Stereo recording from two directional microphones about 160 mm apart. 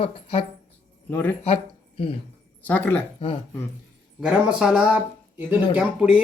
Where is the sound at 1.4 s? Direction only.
40° left (ahead or behind).